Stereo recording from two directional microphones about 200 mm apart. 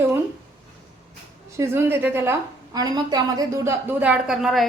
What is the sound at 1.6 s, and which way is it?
A woman's voice, 10° right (ahead or behind).